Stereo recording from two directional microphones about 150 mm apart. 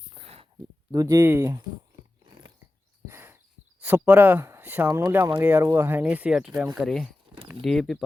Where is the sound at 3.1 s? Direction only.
15° right (ahead or behind).